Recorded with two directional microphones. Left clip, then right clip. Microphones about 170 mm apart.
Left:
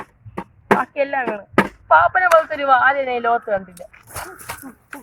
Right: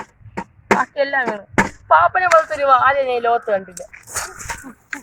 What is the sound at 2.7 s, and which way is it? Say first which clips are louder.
Speech: right 1 dB; 30° right (ahead or behind).